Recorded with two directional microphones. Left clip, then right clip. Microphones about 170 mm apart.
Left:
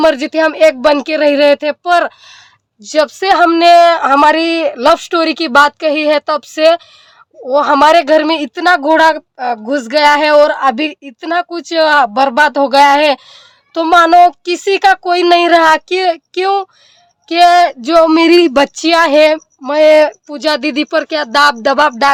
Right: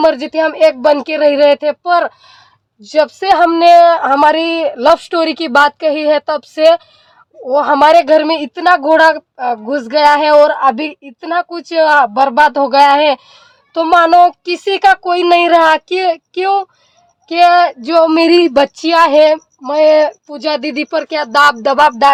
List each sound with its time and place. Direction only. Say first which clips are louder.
0.0 s speech: left 1 dB; 20° left (ahead or behind)